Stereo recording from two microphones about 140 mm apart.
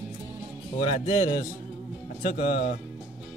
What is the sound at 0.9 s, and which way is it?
Speech, 45° left (ahead or behind).